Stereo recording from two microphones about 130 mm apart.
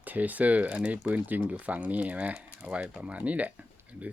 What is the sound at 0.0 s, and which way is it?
Speech, 10° right (ahead or behind).